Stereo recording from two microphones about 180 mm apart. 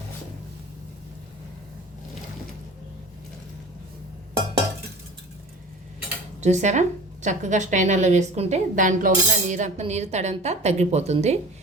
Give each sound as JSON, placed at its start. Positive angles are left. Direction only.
{"t": 6.4, "sound": "a woman's voice", "side_deg": -40}